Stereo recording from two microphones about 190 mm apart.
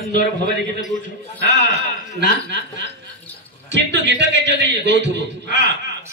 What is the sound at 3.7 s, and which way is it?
A man's voice, 65° right (ahead or behind).